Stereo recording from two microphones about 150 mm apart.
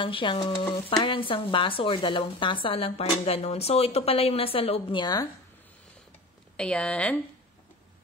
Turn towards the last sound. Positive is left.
turn(degrees=10)  # may be behind; listen again after turning